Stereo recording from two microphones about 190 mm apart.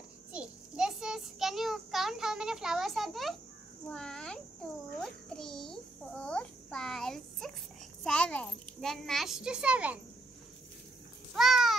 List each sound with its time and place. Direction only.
0.3 s child singing: 5° right (ahead or behind)
3.9 s a child's voice: 5° left (ahead or behind)
11.3 s a sound: centre (ahead or behind)